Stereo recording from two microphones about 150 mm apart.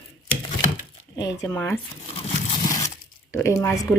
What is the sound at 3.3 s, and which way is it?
Speech, 20° left (ahead or behind).